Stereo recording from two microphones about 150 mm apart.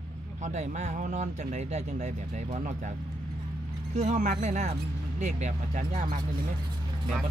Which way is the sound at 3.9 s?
50° right (ahead or behind).